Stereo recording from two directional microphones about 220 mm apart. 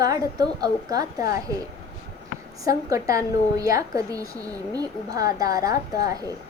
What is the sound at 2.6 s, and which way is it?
A woman's voice, 15° right (ahead or behind).